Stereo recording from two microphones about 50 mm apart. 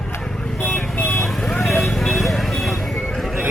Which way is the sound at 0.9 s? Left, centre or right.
Left.